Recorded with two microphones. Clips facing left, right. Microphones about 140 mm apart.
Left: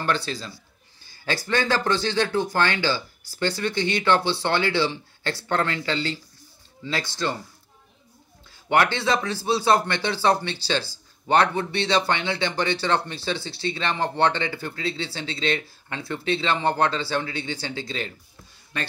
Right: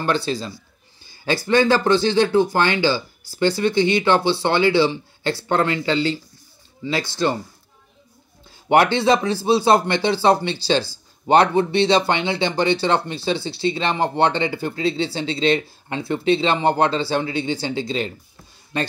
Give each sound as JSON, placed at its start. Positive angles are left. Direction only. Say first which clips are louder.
{"t": 0.0, "sound": "speech", "louder": "right 5 dB", "side_deg": -15}
{"t": 1.0, "sound": "a sound", "louder": "right 6 dB", "side_deg": -15}
{"t": 1.5, "sound": "speech", "louder": "right 7 dB", "side_deg": -20}
{"t": 8.6, "sound": "speech", "louder": "right 6 dB", "side_deg": -20}